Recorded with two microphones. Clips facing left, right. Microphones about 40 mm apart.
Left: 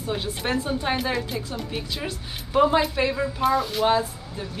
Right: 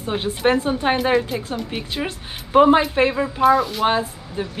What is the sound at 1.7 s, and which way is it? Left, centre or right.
Speech, right.